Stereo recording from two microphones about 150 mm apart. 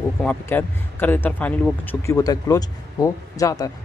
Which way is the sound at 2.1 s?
25° left (ahead or behind).